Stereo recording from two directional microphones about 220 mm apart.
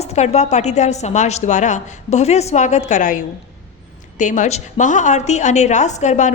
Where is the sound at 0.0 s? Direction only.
30° left (ahead or behind).